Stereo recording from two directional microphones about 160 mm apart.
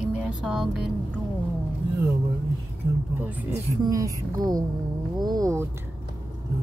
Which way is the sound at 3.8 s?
20° right (ahead or behind).